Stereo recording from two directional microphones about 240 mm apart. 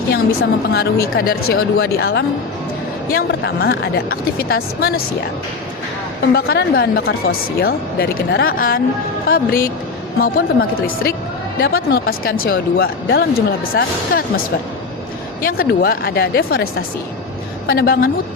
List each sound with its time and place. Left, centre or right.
0.1 s a woman's voice: left
6.3 s a woman's voice: left